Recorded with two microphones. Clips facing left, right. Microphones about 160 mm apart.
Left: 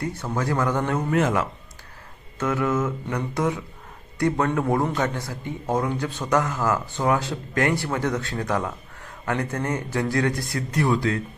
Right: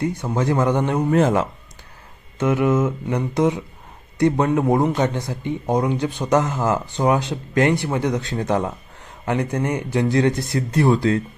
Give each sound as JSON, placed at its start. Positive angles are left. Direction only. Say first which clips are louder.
{"t": 0.0, "sound": "a man's voice", "louder": "right 5 dB", "side_deg": -15}
{"t": 1.1, "sound": "speech", "louder": "right 5 dB", "side_deg": -30}
{"t": 2.4, "sound": "a man's voice", "louder": "right 5 dB", "side_deg": -20}